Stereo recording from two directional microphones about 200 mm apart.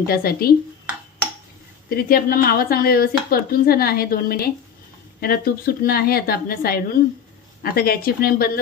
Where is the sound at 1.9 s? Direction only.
45° left (ahead or behind).